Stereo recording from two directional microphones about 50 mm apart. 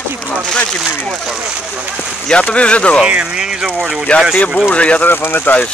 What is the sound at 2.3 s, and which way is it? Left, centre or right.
Speech, left.